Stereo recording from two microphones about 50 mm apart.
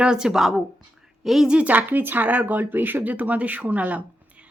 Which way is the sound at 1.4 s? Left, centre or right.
Right.